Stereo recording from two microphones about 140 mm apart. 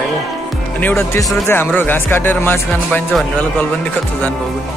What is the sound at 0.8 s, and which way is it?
Speech, 15° left (ahead or behind).